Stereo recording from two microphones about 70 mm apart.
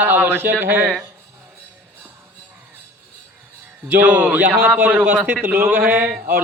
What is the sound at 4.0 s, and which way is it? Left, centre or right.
Speech, right.